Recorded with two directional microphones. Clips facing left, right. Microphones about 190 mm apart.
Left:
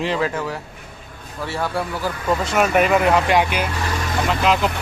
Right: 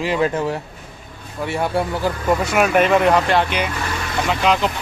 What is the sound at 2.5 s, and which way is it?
A man's voice, 5° right (ahead or behind).